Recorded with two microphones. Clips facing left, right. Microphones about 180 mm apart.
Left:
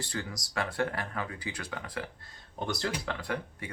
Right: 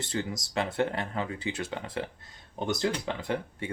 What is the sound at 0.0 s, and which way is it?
Speech, 20° right (ahead or behind).